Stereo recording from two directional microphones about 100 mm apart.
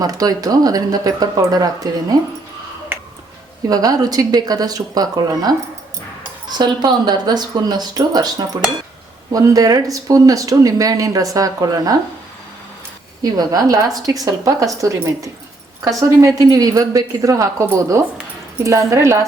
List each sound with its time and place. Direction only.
0.0 s speech: 40° right (ahead or behind)
3.7 s speech: 40° right (ahead or behind)
9.3 s speech: 35° right (ahead or behind)
13.3 s speech: 40° right (ahead or behind)